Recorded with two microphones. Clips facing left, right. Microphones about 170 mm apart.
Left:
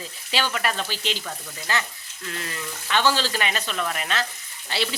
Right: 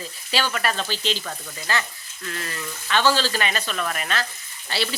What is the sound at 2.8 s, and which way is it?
Speech, 15° left (ahead or behind).